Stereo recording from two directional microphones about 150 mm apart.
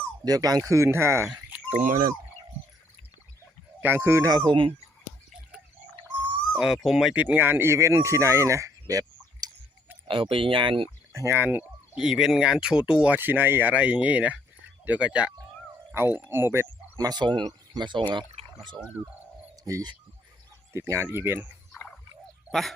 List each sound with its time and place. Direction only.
0.3 s speech: 25° right (ahead or behind)
1.3 s chicken: 5° right (ahead or behind)
3.8 s speech: 15° right (ahead or behind)
4.4 s speech: 35° right (ahead or behind)
6.6 s speech: 5° right (ahead or behind); by 9.5 s 25° right (ahead or behind)
10.1 s speech: 35° right (ahead or behind)
11.1 s speech: 20° right (ahead or behind)
19.6 s speech: 25° right (ahead or behind)
21.7 s a sound: 5° left (ahead or behind)